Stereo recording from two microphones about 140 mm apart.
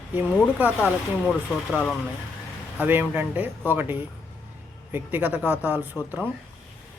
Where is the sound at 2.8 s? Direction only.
15° right (ahead or behind).